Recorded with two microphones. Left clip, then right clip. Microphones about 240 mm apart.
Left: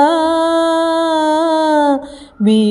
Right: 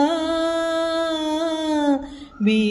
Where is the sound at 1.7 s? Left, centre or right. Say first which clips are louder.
Left 6 dB; left.